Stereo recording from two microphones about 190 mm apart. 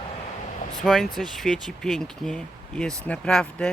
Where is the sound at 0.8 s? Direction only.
Centre (ahead or behind).